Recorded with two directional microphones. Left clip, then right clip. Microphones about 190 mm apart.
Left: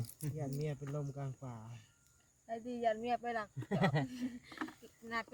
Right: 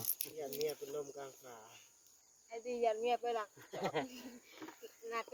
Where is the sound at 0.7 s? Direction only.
35° left (ahead or behind).